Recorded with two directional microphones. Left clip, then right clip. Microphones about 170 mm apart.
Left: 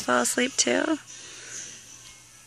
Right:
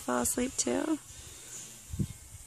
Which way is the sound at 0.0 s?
5° left (ahead or behind).